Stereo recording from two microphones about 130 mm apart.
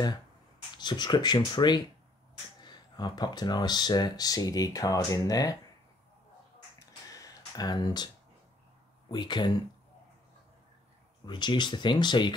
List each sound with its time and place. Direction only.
0.7 s speech: 35° left (ahead or behind)
6.8 s typing: 30° left (ahead or behind)
9.1 s speech: 35° left (ahead or behind)
11.2 s speech: 35° left (ahead or behind)